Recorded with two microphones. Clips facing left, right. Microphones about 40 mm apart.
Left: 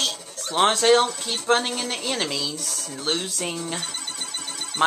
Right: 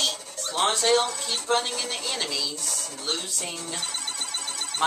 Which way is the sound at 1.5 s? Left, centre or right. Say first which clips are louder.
Left 4 dB; left.